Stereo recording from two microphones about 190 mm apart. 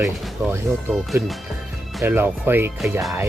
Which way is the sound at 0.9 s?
Centre (ahead or behind).